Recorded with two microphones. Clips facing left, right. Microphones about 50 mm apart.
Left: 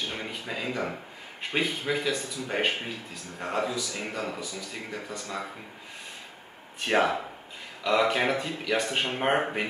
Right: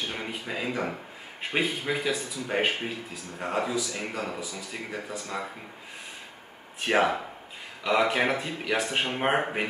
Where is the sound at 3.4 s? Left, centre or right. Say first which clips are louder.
Right 1 dB; centre.